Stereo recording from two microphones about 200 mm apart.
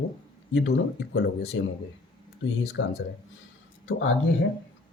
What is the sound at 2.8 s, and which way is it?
Speech, 70° left (ahead or behind).